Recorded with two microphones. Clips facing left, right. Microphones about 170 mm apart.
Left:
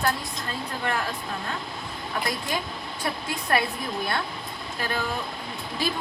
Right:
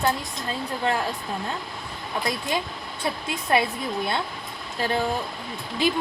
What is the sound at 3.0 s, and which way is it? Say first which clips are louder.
Speech: right 2 dB; 25° right (ahead or behind).